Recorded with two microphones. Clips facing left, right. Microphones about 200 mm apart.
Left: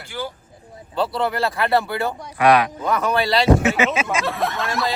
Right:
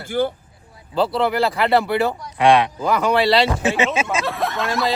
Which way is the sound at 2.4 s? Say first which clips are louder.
Right 1 dB; 25° right (ahead or behind).